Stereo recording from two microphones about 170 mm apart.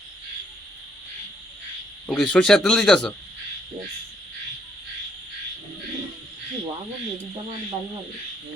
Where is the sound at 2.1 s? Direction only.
5° left (ahead or behind).